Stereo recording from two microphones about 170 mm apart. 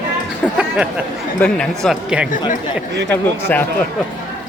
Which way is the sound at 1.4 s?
5° left (ahead or behind).